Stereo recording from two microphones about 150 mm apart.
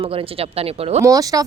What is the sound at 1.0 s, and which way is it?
Speech, 25° right (ahead or behind).